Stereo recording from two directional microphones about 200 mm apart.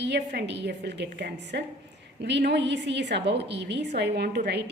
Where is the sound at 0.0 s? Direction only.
55° right (ahead or behind).